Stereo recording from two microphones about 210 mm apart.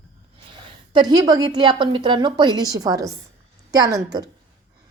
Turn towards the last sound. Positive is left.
turn(degrees=-15)  # may be behind; listen again after turning